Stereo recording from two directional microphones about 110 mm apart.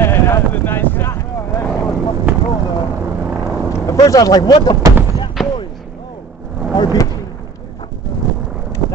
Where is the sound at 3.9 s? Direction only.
35° left (ahead or behind).